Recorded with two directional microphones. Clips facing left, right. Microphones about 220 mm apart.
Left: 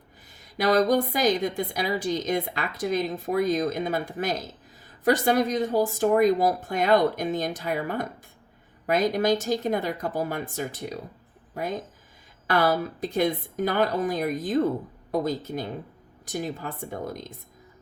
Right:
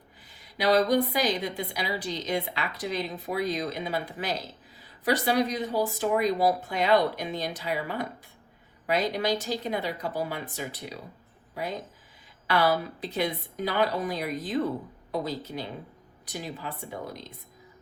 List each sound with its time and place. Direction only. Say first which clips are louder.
0.4 s a woman's voice: left 2 dB; 45° left (ahead or behind)